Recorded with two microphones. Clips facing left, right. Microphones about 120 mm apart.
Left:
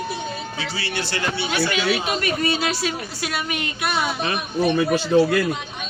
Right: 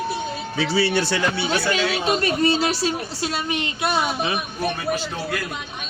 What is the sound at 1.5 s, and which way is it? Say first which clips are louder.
A woman's voice: even; 35° right (ahead or behind).